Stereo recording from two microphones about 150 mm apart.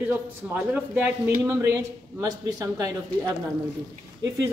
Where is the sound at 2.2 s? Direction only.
25° right (ahead or behind).